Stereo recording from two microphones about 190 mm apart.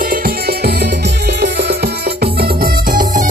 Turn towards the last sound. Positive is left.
turn(degrees=-50)  # may be behind; listen again after turning